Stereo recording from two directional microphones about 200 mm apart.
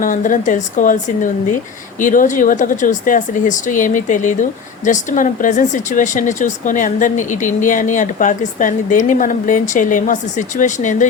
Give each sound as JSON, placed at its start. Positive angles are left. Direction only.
{"t": 0.0, "sound": "speech", "side_deg": 40}